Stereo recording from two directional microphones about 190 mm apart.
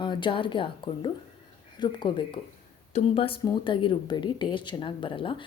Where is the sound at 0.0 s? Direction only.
25° left (ahead or behind).